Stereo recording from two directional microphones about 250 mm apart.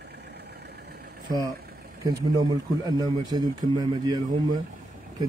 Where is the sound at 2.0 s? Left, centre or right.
Centre.